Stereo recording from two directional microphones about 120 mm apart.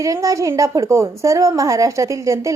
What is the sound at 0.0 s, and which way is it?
A woman's voice, 25° right (ahead or behind).